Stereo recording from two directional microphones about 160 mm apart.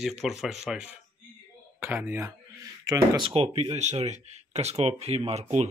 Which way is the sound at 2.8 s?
30° right (ahead or behind).